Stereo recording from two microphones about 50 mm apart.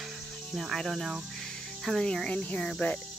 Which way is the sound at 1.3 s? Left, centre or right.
Centre.